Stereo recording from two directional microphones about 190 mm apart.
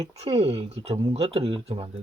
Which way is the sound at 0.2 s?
30° right (ahead or behind).